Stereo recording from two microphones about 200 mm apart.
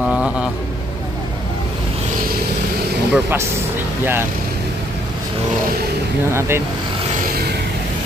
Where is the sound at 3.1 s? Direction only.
10° right (ahead or behind).